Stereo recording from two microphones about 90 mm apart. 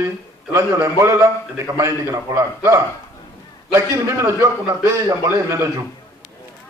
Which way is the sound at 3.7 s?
35° right (ahead or behind).